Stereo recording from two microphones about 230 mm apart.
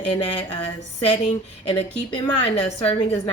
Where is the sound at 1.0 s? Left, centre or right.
Left.